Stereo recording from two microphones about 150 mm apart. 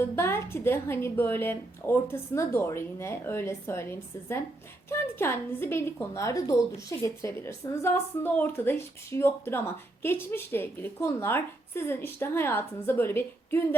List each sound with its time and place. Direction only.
0.0 s a woman's voice: 15° left (ahead or behind)